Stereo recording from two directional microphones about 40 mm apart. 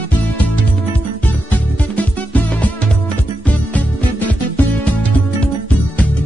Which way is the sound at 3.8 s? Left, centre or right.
Left.